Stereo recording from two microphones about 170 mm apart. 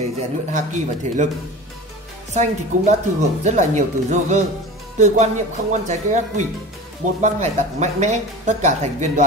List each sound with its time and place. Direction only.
0.5 s speech: 45° right (ahead or behind)
2.3 s speech: 45° right (ahead or behind)